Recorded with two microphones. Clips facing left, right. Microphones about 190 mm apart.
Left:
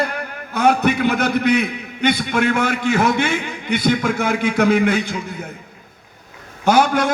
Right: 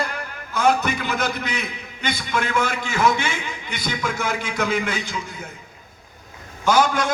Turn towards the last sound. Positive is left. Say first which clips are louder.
# left 3 dB
turn(degrees=60)  # may be behind; listen again after turning